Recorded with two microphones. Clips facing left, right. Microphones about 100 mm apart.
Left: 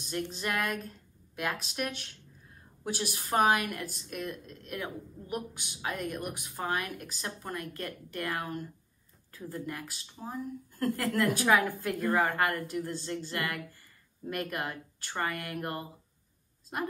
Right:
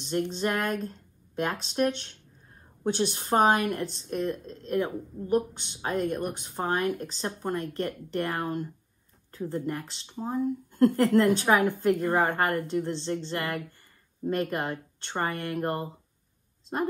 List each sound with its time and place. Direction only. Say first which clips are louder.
0.3 s a woman's voice: right 5 dB; 30° right (ahead or behind)